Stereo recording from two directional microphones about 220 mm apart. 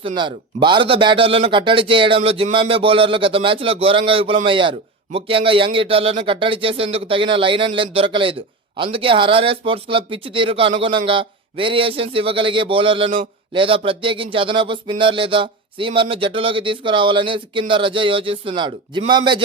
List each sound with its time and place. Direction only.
0.0 s a man's voice: 20° right (ahead or behind)